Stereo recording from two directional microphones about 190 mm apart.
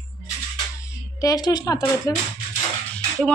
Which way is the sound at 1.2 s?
20° left (ahead or behind).